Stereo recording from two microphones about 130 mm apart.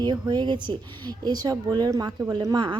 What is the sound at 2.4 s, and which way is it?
Speech, 35° right (ahead or behind).